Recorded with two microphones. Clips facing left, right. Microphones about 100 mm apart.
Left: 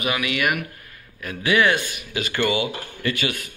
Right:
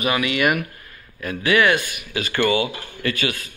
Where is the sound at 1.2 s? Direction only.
20° left (ahead or behind).